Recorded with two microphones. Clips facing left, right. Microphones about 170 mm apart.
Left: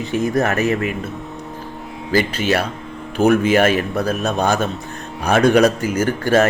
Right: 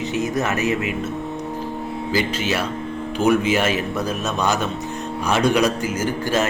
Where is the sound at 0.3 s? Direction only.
55° left (ahead or behind).